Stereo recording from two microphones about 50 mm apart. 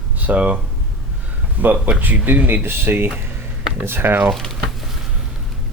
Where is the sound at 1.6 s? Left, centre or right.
Right.